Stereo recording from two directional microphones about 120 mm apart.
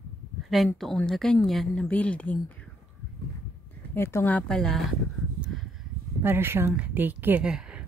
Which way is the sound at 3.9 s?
20° left (ahead or behind).